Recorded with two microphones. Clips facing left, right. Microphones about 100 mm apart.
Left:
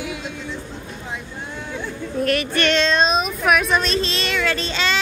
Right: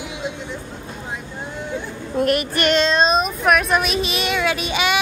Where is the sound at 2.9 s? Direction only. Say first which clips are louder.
Right 1 dB; centre (ahead or behind).